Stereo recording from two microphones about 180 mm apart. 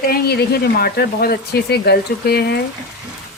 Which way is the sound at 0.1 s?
60° left (ahead or behind).